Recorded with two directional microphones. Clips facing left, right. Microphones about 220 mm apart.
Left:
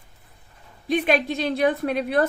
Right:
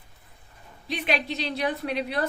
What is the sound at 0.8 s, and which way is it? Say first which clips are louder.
A woman's voice: left 7 dB; 50° left (ahead or behind).